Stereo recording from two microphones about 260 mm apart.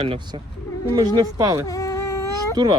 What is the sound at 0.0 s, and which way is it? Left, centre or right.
Speech, centre.